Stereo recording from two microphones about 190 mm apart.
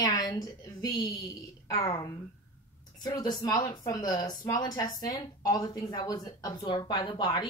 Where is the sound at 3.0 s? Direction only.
20° left (ahead or behind).